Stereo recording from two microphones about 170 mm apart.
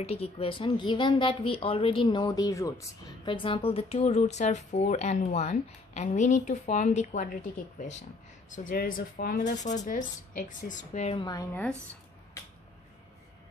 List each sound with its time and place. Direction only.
0.0 s a woman's voice: 35° left (ahead or behind); by 2.9 s 20° left (ahead or behind)
3.3 s speech: 30° left (ahead or behind)
8.6 s speech: 55° left (ahead or behind)
9.8 s speech: 50° left (ahead or behind)
11.1 s a woman's voice: 20° left (ahead or behind)